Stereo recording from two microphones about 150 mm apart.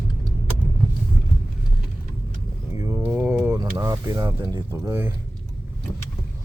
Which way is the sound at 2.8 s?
20° right (ahead or behind).